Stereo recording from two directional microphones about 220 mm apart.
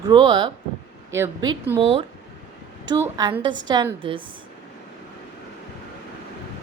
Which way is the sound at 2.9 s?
20° right (ahead or behind).